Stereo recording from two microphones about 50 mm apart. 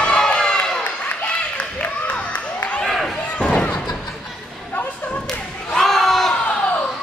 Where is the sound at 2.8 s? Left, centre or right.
Centre.